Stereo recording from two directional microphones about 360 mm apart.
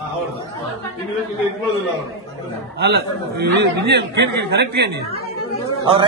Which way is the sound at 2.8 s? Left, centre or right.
Right.